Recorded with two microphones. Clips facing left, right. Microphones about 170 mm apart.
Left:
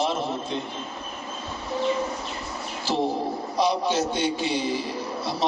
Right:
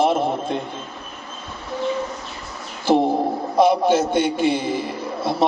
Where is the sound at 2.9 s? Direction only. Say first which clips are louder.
Right 8 dB; 55° right (ahead or behind).